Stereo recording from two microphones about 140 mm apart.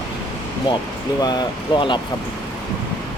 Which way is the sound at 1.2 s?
30° left (ahead or behind).